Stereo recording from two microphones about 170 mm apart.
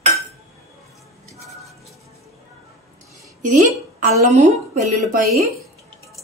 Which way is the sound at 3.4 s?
45° right (ahead or behind).